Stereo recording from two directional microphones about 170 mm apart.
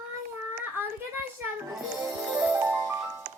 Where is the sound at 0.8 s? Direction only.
10° right (ahead or behind).